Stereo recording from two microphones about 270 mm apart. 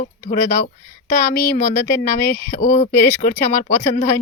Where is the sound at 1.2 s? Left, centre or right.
Centre.